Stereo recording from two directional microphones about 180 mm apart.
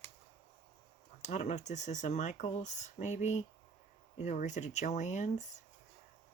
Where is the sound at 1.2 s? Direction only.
40° left (ahead or behind).